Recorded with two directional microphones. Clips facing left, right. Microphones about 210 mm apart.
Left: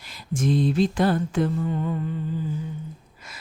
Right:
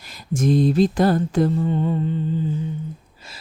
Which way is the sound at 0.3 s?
40° right (ahead or behind).